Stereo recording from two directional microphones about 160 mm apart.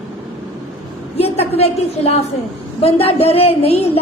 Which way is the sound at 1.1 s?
40° left (ahead or behind).